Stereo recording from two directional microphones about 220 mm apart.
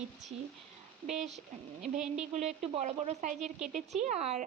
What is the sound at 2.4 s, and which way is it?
A woman's voice, 30° right (ahead or behind).